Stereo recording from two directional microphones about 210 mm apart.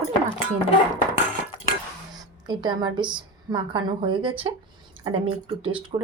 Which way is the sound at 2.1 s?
20° right (ahead or behind).